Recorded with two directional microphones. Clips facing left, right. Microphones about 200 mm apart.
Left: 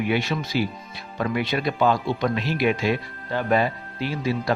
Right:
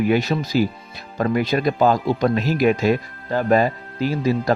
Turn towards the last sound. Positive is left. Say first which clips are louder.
# right 5 dB
turn(degrees=-40)  # may be behind; listen again after turning